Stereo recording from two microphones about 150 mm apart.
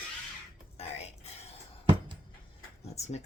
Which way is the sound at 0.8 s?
45° left (ahead or behind).